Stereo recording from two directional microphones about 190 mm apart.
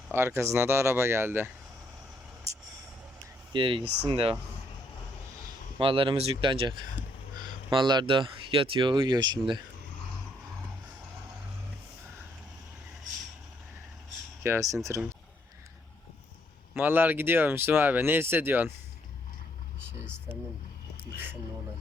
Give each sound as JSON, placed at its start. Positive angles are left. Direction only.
{"t": 0.1, "sound": "speech", "side_deg": -10}
{"t": 3.5, "sound": "speech", "side_deg": -25}
{"t": 5.8, "sound": "speech", "side_deg": -25}
{"t": 14.4, "sound": "speech", "side_deg": -15}
{"t": 16.7, "sound": "speech", "side_deg": -10}